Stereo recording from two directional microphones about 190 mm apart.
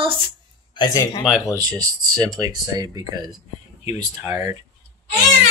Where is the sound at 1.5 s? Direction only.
20° right (ahead or behind).